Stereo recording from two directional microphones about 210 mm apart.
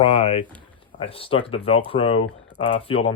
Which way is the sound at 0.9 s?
25° left (ahead or behind).